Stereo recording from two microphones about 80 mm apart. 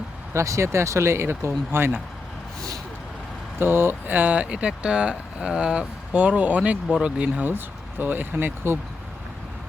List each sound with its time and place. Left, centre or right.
0.3 s speech: right
3.6 s speech: right
7.4 s speech: right